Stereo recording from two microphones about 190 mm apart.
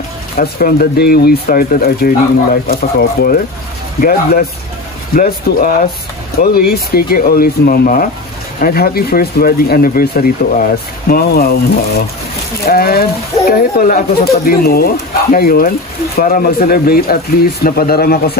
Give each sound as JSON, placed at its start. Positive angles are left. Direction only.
{"t": 0.4, "sound": "speech", "side_deg": 50}